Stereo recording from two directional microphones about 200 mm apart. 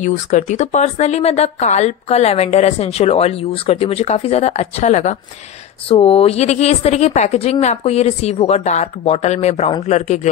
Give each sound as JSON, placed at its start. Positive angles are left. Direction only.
{"t": 0.0, "sound": "speech", "side_deg": 40}